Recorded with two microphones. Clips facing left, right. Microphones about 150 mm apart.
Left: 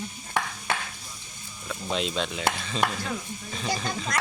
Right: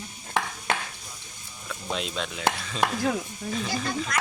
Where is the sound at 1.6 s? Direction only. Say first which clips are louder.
Left 3 dB; centre (ahead or behind).